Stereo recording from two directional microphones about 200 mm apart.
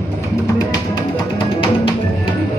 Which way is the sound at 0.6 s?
20° left (ahead or behind).